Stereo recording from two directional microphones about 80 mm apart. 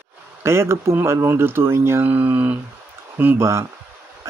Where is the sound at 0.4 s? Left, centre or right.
Right.